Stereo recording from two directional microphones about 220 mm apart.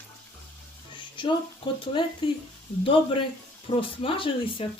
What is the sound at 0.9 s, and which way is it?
Speech, 20° left (ahead or behind).